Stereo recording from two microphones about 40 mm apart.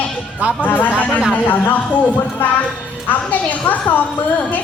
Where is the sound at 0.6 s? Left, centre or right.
Left.